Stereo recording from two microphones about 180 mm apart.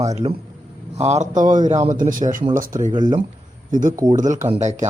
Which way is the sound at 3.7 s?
45° right (ahead or behind).